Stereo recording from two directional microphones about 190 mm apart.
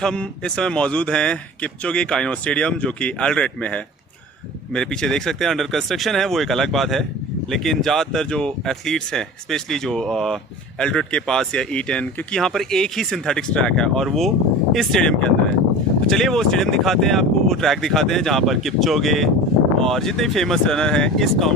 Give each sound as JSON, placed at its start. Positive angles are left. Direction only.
{"t": 0.0, "sound": "speech", "side_deg": 5}